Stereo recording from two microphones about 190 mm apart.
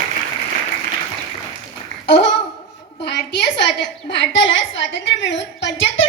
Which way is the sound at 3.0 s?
60° left (ahead or behind).